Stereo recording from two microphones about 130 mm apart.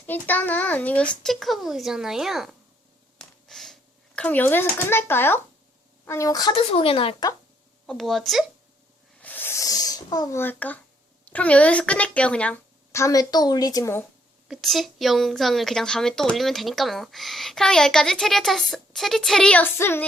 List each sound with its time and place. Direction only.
0.0 s a woman's voice: 15° left (ahead or behind); by 2.6 s 5° right (ahead or behind)
3.2 s a sound: centre (ahead or behind)
6.1 s a woman's voice: 25° left (ahead or behind)
6.5 s speech: 45° left (ahead or behind)
7.9 s a woman's voice: centre (ahead or behind)
9.2 s snake: 15° left (ahead or behind)
9.6 s speech: 30° left (ahead or behind)
10.4 s a child's voice: 15° left (ahead or behind)
12.9 s a woman's voice: 25° left (ahead or behind)
14.4 s a woman's voice: centre (ahead or behind); by 20.1 s 15° left (ahead or behind)